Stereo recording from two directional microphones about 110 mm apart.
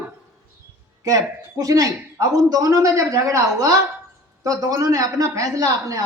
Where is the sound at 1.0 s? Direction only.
30° right (ahead or behind).